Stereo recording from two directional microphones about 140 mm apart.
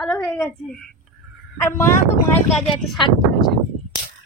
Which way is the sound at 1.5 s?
20° left (ahead or behind).